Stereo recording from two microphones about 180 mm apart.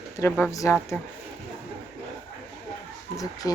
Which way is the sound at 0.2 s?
15° left (ahead or behind).